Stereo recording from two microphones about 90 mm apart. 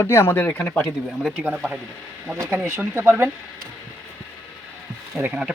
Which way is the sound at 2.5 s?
25° right (ahead or behind).